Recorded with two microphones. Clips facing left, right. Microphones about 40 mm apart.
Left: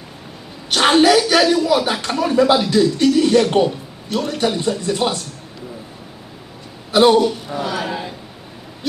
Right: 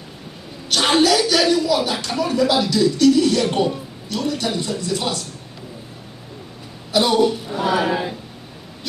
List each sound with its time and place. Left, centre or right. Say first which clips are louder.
0.7 s a sound: left 3 dB; centre
1.9 s speech: left 3 dB; centre
6.9 s a man's voice: left 6 dB; left
7.2 s speech: left 1 dB; centre